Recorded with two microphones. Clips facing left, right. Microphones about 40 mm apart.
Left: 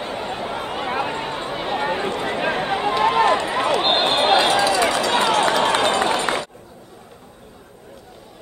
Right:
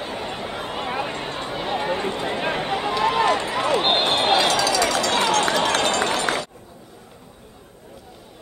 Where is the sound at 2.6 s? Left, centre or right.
Centre.